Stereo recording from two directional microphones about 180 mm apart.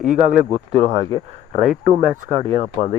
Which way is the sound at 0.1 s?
45° right (ahead or behind).